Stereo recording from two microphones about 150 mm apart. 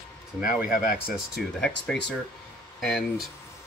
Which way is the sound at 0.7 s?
75° left (ahead or behind).